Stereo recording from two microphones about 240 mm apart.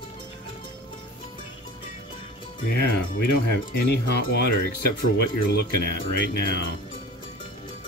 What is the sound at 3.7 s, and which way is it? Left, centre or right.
Speech, left.